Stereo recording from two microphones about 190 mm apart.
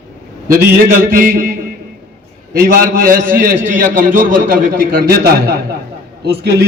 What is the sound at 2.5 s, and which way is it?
A man's voice, 50° right (ahead or behind).